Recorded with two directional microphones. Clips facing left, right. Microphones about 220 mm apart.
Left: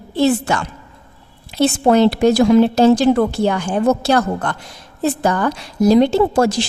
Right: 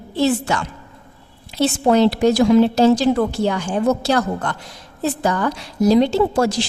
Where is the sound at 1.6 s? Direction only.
55° left (ahead or behind).